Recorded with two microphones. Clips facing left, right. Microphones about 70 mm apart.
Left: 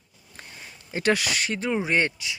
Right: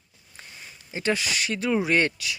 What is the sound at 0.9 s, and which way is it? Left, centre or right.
Speech, left.